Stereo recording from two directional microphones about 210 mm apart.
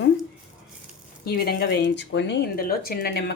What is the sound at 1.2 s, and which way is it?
Speech, 50° left (ahead or behind).